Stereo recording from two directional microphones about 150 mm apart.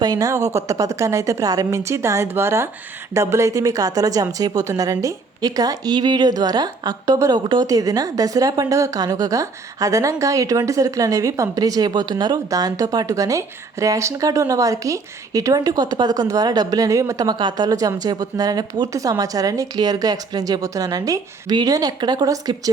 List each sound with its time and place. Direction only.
0.0 s a woman's voice: 25° right (ahead or behind)